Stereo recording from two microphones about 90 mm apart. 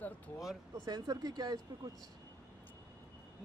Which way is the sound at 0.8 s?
50° right (ahead or behind).